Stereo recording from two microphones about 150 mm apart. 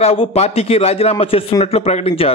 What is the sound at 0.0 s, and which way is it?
A man's voice, 40° left (ahead or behind).